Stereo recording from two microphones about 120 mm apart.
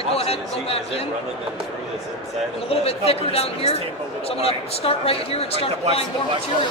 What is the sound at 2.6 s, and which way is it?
A man's voice, 55° left (ahead or behind).